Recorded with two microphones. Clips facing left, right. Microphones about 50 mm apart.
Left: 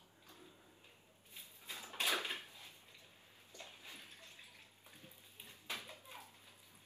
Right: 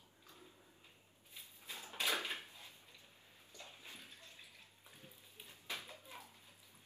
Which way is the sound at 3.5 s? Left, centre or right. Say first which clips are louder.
Left 1 dB; left.